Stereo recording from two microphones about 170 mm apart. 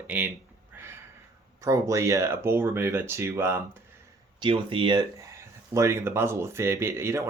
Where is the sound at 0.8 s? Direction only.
15° right (ahead or behind).